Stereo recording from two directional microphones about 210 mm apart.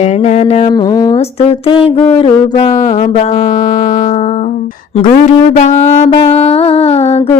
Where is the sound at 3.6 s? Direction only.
45° left (ahead or behind).